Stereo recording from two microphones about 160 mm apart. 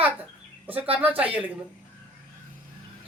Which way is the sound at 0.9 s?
10° right (ahead or behind).